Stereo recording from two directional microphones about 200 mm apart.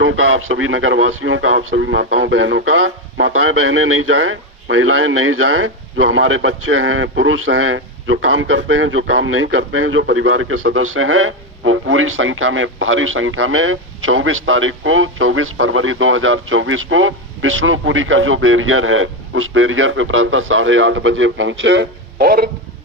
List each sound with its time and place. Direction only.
0.0 s speech: 75° right (ahead or behind); by 22.4 s 50° right (ahead or behind)